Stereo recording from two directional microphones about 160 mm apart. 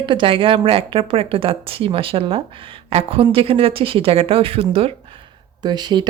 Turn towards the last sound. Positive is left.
turn(degrees=-25)  # may be behind; listen again after turning